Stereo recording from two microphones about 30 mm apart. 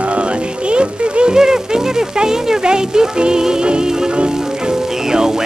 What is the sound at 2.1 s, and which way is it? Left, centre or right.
A man's voice, right.